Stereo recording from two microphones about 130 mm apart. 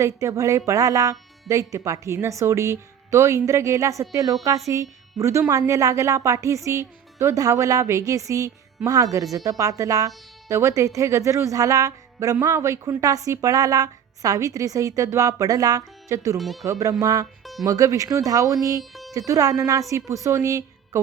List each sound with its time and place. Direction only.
0.0 s speech: 20° right (ahead or behind)
16.4 s speech: centre (ahead or behind)
16.6 s speech: 25° right (ahead or behind)
18.8 s music: centre (ahead or behind)
19.1 s speech: 25° right (ahead or behind)